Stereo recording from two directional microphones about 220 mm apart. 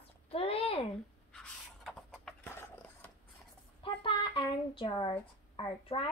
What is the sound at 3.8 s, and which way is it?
A woman's voice, 25° left (ahead or behind).